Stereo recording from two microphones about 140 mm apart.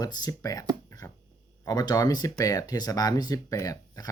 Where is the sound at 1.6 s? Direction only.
30° left (ahead or behind).